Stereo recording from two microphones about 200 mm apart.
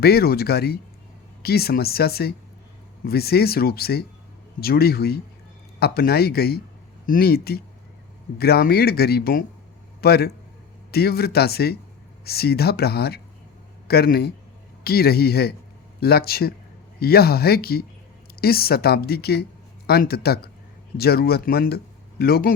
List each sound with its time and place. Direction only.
0.0 s speech: 50° left (ahead or behind)